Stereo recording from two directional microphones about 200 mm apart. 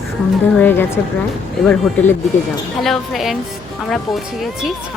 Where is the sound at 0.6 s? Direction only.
10° left (ahead or behind).